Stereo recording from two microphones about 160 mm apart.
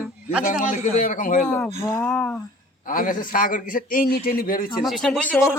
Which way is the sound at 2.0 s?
5° left (ahead or behind).